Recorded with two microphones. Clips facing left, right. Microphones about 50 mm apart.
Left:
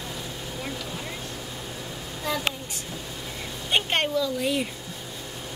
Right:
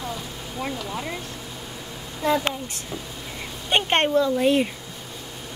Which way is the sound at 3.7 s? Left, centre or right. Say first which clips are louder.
Right 4 dB; right.